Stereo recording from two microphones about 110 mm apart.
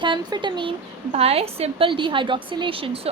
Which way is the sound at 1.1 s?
65° right (ahead or behind).